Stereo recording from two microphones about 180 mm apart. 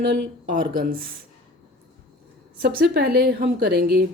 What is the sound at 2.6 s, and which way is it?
Speech, 60° right (ahead or behind).